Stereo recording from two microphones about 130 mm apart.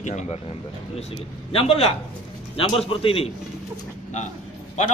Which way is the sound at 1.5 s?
45° left (ahead or behind).